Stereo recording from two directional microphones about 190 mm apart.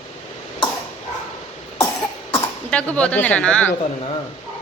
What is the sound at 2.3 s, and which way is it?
Speech, 5° left (ahead or behind).